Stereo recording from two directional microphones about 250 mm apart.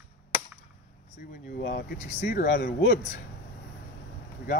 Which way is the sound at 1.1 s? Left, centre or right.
Left.